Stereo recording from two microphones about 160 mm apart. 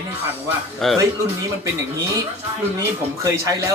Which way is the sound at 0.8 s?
5° left (ahead or behind).